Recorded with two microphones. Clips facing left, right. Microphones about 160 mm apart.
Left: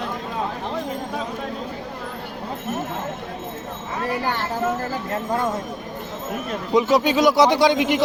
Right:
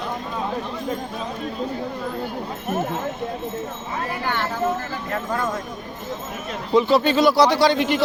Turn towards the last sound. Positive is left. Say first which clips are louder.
# left 1 dB
turn(degrees=15)  # may be behind; listen again after turning